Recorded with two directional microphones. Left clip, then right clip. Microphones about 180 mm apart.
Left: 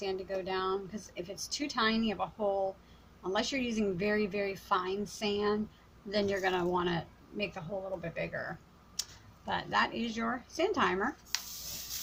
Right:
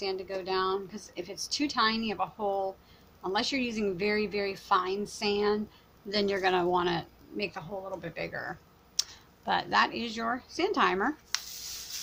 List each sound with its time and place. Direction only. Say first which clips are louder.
0.0 s a woman's voice: right 2 dB; 20° right (ahead or behind)